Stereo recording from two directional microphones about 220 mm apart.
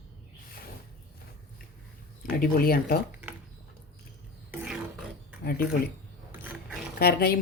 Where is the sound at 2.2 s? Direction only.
40° left (ahead or behind).